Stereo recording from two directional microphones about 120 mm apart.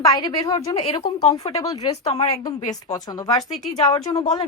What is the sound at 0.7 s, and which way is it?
Speech, 40° left (ahead or behind).